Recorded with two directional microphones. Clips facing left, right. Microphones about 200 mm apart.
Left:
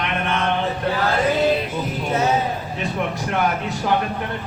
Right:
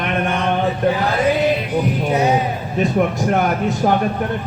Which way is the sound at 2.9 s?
45° right (ahead or behind).